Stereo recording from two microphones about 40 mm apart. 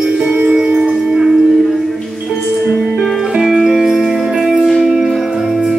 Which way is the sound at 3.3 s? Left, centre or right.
Centre.